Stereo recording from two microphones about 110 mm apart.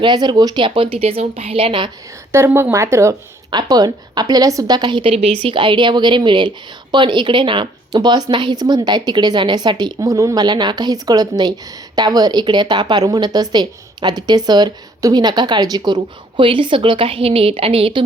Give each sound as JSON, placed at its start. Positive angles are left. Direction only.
{"t": 0.0, "sound": "a woman's voice", "side_deg": -40}
{"t": 2.3, "sound": "speech", "side_deg": -25}
{"t": 3.5, "sound": "a woman's voice", "side_deg": -40}
{"t": 16.4, "sound": "a woman's voice", "side_deg": -50}